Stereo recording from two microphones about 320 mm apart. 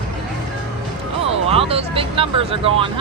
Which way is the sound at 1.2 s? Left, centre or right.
Centre.